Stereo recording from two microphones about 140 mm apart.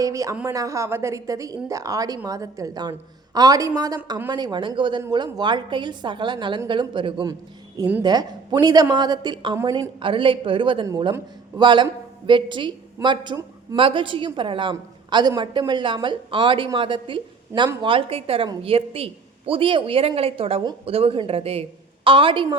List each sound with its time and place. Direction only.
0.0 s a woman's voice: 25° right (ahead or behind)